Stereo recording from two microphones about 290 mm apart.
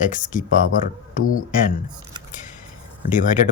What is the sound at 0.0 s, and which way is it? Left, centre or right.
Speech, left.